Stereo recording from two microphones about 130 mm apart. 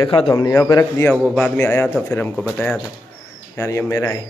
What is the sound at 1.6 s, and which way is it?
Speech, 15° left (ahead or behind).